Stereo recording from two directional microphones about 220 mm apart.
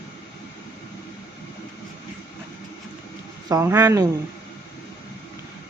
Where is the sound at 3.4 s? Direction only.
15° right (ahead or behind).